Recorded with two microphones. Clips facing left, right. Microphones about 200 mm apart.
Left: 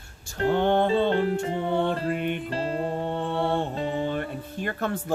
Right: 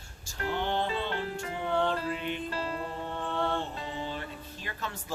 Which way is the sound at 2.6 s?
30° left (ahead or behind).